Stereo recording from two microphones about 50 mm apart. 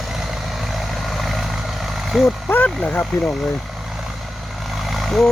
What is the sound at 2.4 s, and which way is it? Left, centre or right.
Speech, left.